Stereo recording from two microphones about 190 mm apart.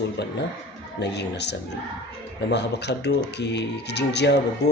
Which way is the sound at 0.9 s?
65° left (ahead or behind).